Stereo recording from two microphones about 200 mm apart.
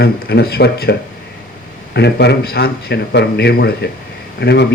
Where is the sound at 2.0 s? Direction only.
55° left (ahead or behind).